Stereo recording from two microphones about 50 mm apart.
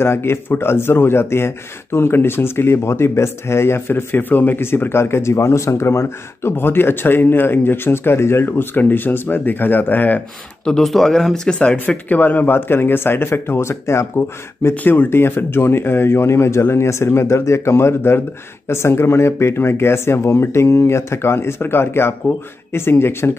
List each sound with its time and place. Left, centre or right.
0.0 s speech: left
6.5 s speech: left
10.8 s speech: centre
11.6 s speech: left
13.5 s speech: left
14.1 s speech: left